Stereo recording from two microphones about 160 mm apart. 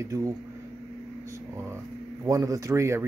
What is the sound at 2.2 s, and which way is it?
Speech, 20° right (ahead or behind).